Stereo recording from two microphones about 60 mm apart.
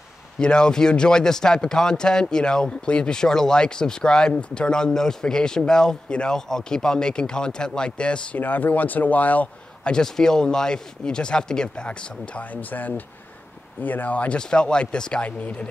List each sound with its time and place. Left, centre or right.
0.4 s speech: centre
8.4 s speech: left
9.8 s speech: centre